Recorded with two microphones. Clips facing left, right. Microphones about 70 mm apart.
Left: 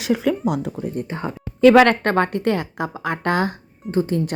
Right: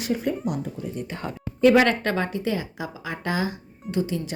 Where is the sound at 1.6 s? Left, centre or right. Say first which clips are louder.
Left 5 dB; left.